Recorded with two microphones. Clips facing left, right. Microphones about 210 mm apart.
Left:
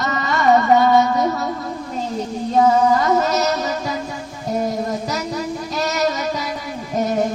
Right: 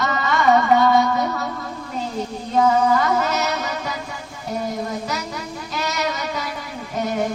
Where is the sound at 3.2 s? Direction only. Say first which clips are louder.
Left 4 dB; 40° left (ahead or behind).